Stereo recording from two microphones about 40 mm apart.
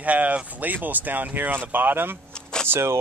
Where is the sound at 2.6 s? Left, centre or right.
Right.